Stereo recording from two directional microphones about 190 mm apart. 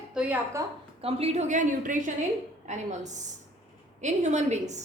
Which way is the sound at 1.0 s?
35° right (ahead or behind).